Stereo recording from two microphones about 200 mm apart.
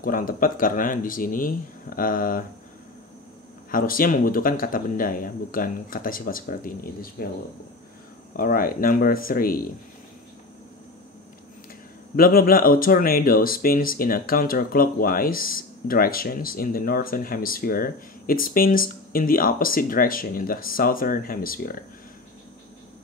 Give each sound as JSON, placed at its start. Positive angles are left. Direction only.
{"t": 0.0, "sound": "speech", "side_deg": 45}
{"t": 3.7, "sound": "speech", "side_deg": 45}
{"t": 8.4, "sound": "speech", "side_deg": 45}
{"t": 12.2, "sound": "speech", "side_deg": 45}